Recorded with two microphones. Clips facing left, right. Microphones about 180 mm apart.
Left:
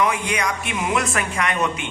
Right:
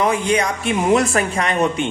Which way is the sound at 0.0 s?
30° right (ahead or behind).